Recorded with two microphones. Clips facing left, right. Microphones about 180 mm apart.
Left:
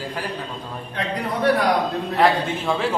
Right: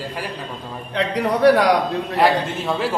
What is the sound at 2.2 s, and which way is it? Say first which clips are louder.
Speech: right 1 dB; 5° right (ahead or behind).